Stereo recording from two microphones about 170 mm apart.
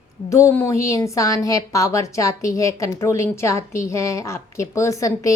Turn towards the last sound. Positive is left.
turn(degrees=20)  # may be behind; listen again after turning